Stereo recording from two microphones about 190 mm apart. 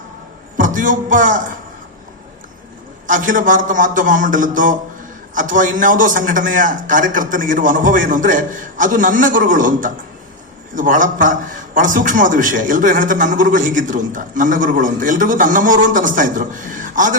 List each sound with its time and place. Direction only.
0.5 s a man's voice: 45° right (ahead or behind)
3.1 s a man's voice: 45° right (ahead or behind)